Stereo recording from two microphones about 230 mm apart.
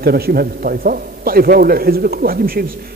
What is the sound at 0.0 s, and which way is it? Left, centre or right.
A man's voice, right.